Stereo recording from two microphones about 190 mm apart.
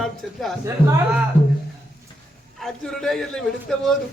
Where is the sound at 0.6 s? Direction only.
15° right (ahead or behind).